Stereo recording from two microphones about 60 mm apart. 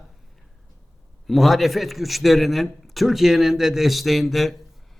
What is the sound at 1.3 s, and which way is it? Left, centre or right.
A man's voice, centre.